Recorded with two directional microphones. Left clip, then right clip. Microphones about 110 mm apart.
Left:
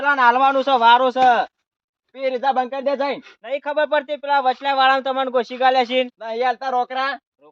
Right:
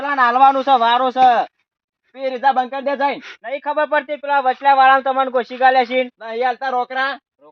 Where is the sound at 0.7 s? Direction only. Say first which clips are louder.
Even; 45° left (ahead or behind).